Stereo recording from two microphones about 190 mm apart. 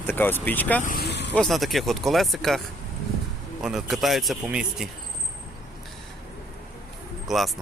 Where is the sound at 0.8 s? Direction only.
45° left (ahead or behind).